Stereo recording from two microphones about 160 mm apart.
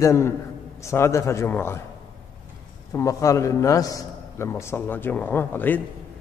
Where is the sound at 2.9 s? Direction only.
20° left (ahead or behind).